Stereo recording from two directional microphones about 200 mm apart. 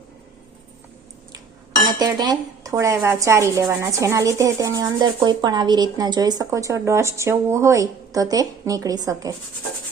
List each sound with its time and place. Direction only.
1.9 s speech: 20° right (ahead or behind)